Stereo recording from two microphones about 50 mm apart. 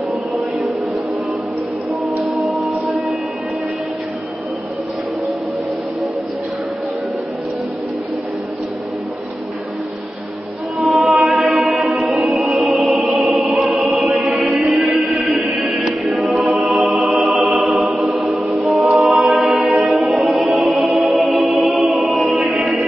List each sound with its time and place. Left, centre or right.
2.3 s music: centre
10.8 s choir: centre
13.2 s music: centre
22.2 s music: centre
22.6 s music: centre